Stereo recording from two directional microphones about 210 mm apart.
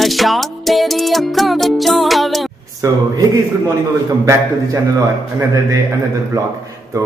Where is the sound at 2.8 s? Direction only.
15° right (ahead or behind).